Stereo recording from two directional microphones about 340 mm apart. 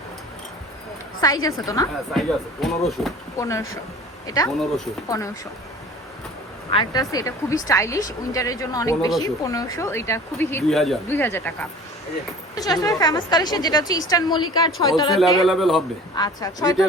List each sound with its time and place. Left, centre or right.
1.2 s speech: centre
6.7 s speech: centre
12.5 s speech: centre
15.1 s speech: centre
16.1 s speech: centre